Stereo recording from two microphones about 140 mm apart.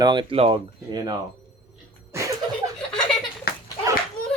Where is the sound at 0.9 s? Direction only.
30° right (ahead or behind).